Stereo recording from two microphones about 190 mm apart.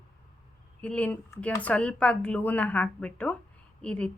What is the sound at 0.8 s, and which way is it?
A woman's voice, 5° left (ahead or behind).